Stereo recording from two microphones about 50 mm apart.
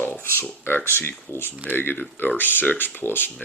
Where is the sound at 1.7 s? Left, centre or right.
Left.